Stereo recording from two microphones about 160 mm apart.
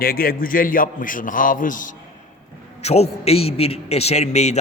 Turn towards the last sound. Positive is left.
turn(degrees=45)  # may be behind; listen again after turning